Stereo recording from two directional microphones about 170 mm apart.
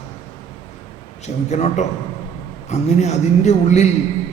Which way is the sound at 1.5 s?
40° left (ahead or behind).